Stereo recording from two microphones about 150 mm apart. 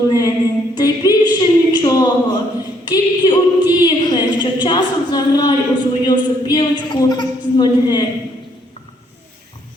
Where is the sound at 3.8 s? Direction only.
30° left (ahead or behind).